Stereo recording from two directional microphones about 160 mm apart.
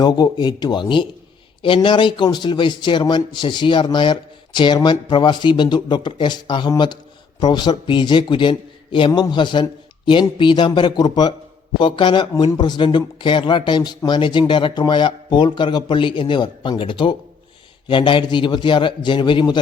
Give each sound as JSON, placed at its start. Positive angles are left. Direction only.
{"t": 0.0, "sound": "a man's voice", "side_deg": 25}